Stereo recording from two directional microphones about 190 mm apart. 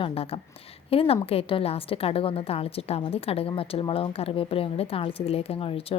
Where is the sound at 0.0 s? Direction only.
30° left (ahead or behind).